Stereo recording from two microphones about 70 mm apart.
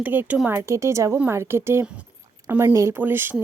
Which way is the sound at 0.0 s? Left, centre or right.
Right.